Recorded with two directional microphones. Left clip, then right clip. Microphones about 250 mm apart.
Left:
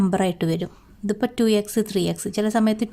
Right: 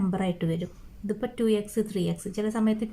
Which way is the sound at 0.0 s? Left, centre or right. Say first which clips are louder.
Left 8 dB; left.